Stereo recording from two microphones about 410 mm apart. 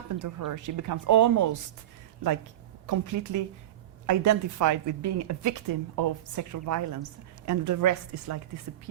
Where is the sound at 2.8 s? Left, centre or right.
Right.